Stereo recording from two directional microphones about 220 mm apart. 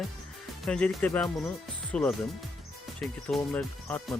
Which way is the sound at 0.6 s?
Centre (ahead or behind).